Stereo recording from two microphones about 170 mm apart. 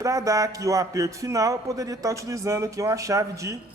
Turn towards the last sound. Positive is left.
turn(degrees=-20)  # may be behind; listen again after turning